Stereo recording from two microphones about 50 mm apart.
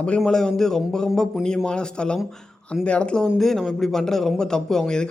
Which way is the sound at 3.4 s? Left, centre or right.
Centre.